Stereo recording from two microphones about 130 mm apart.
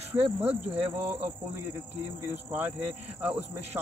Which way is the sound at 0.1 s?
15° right (ahead or behind).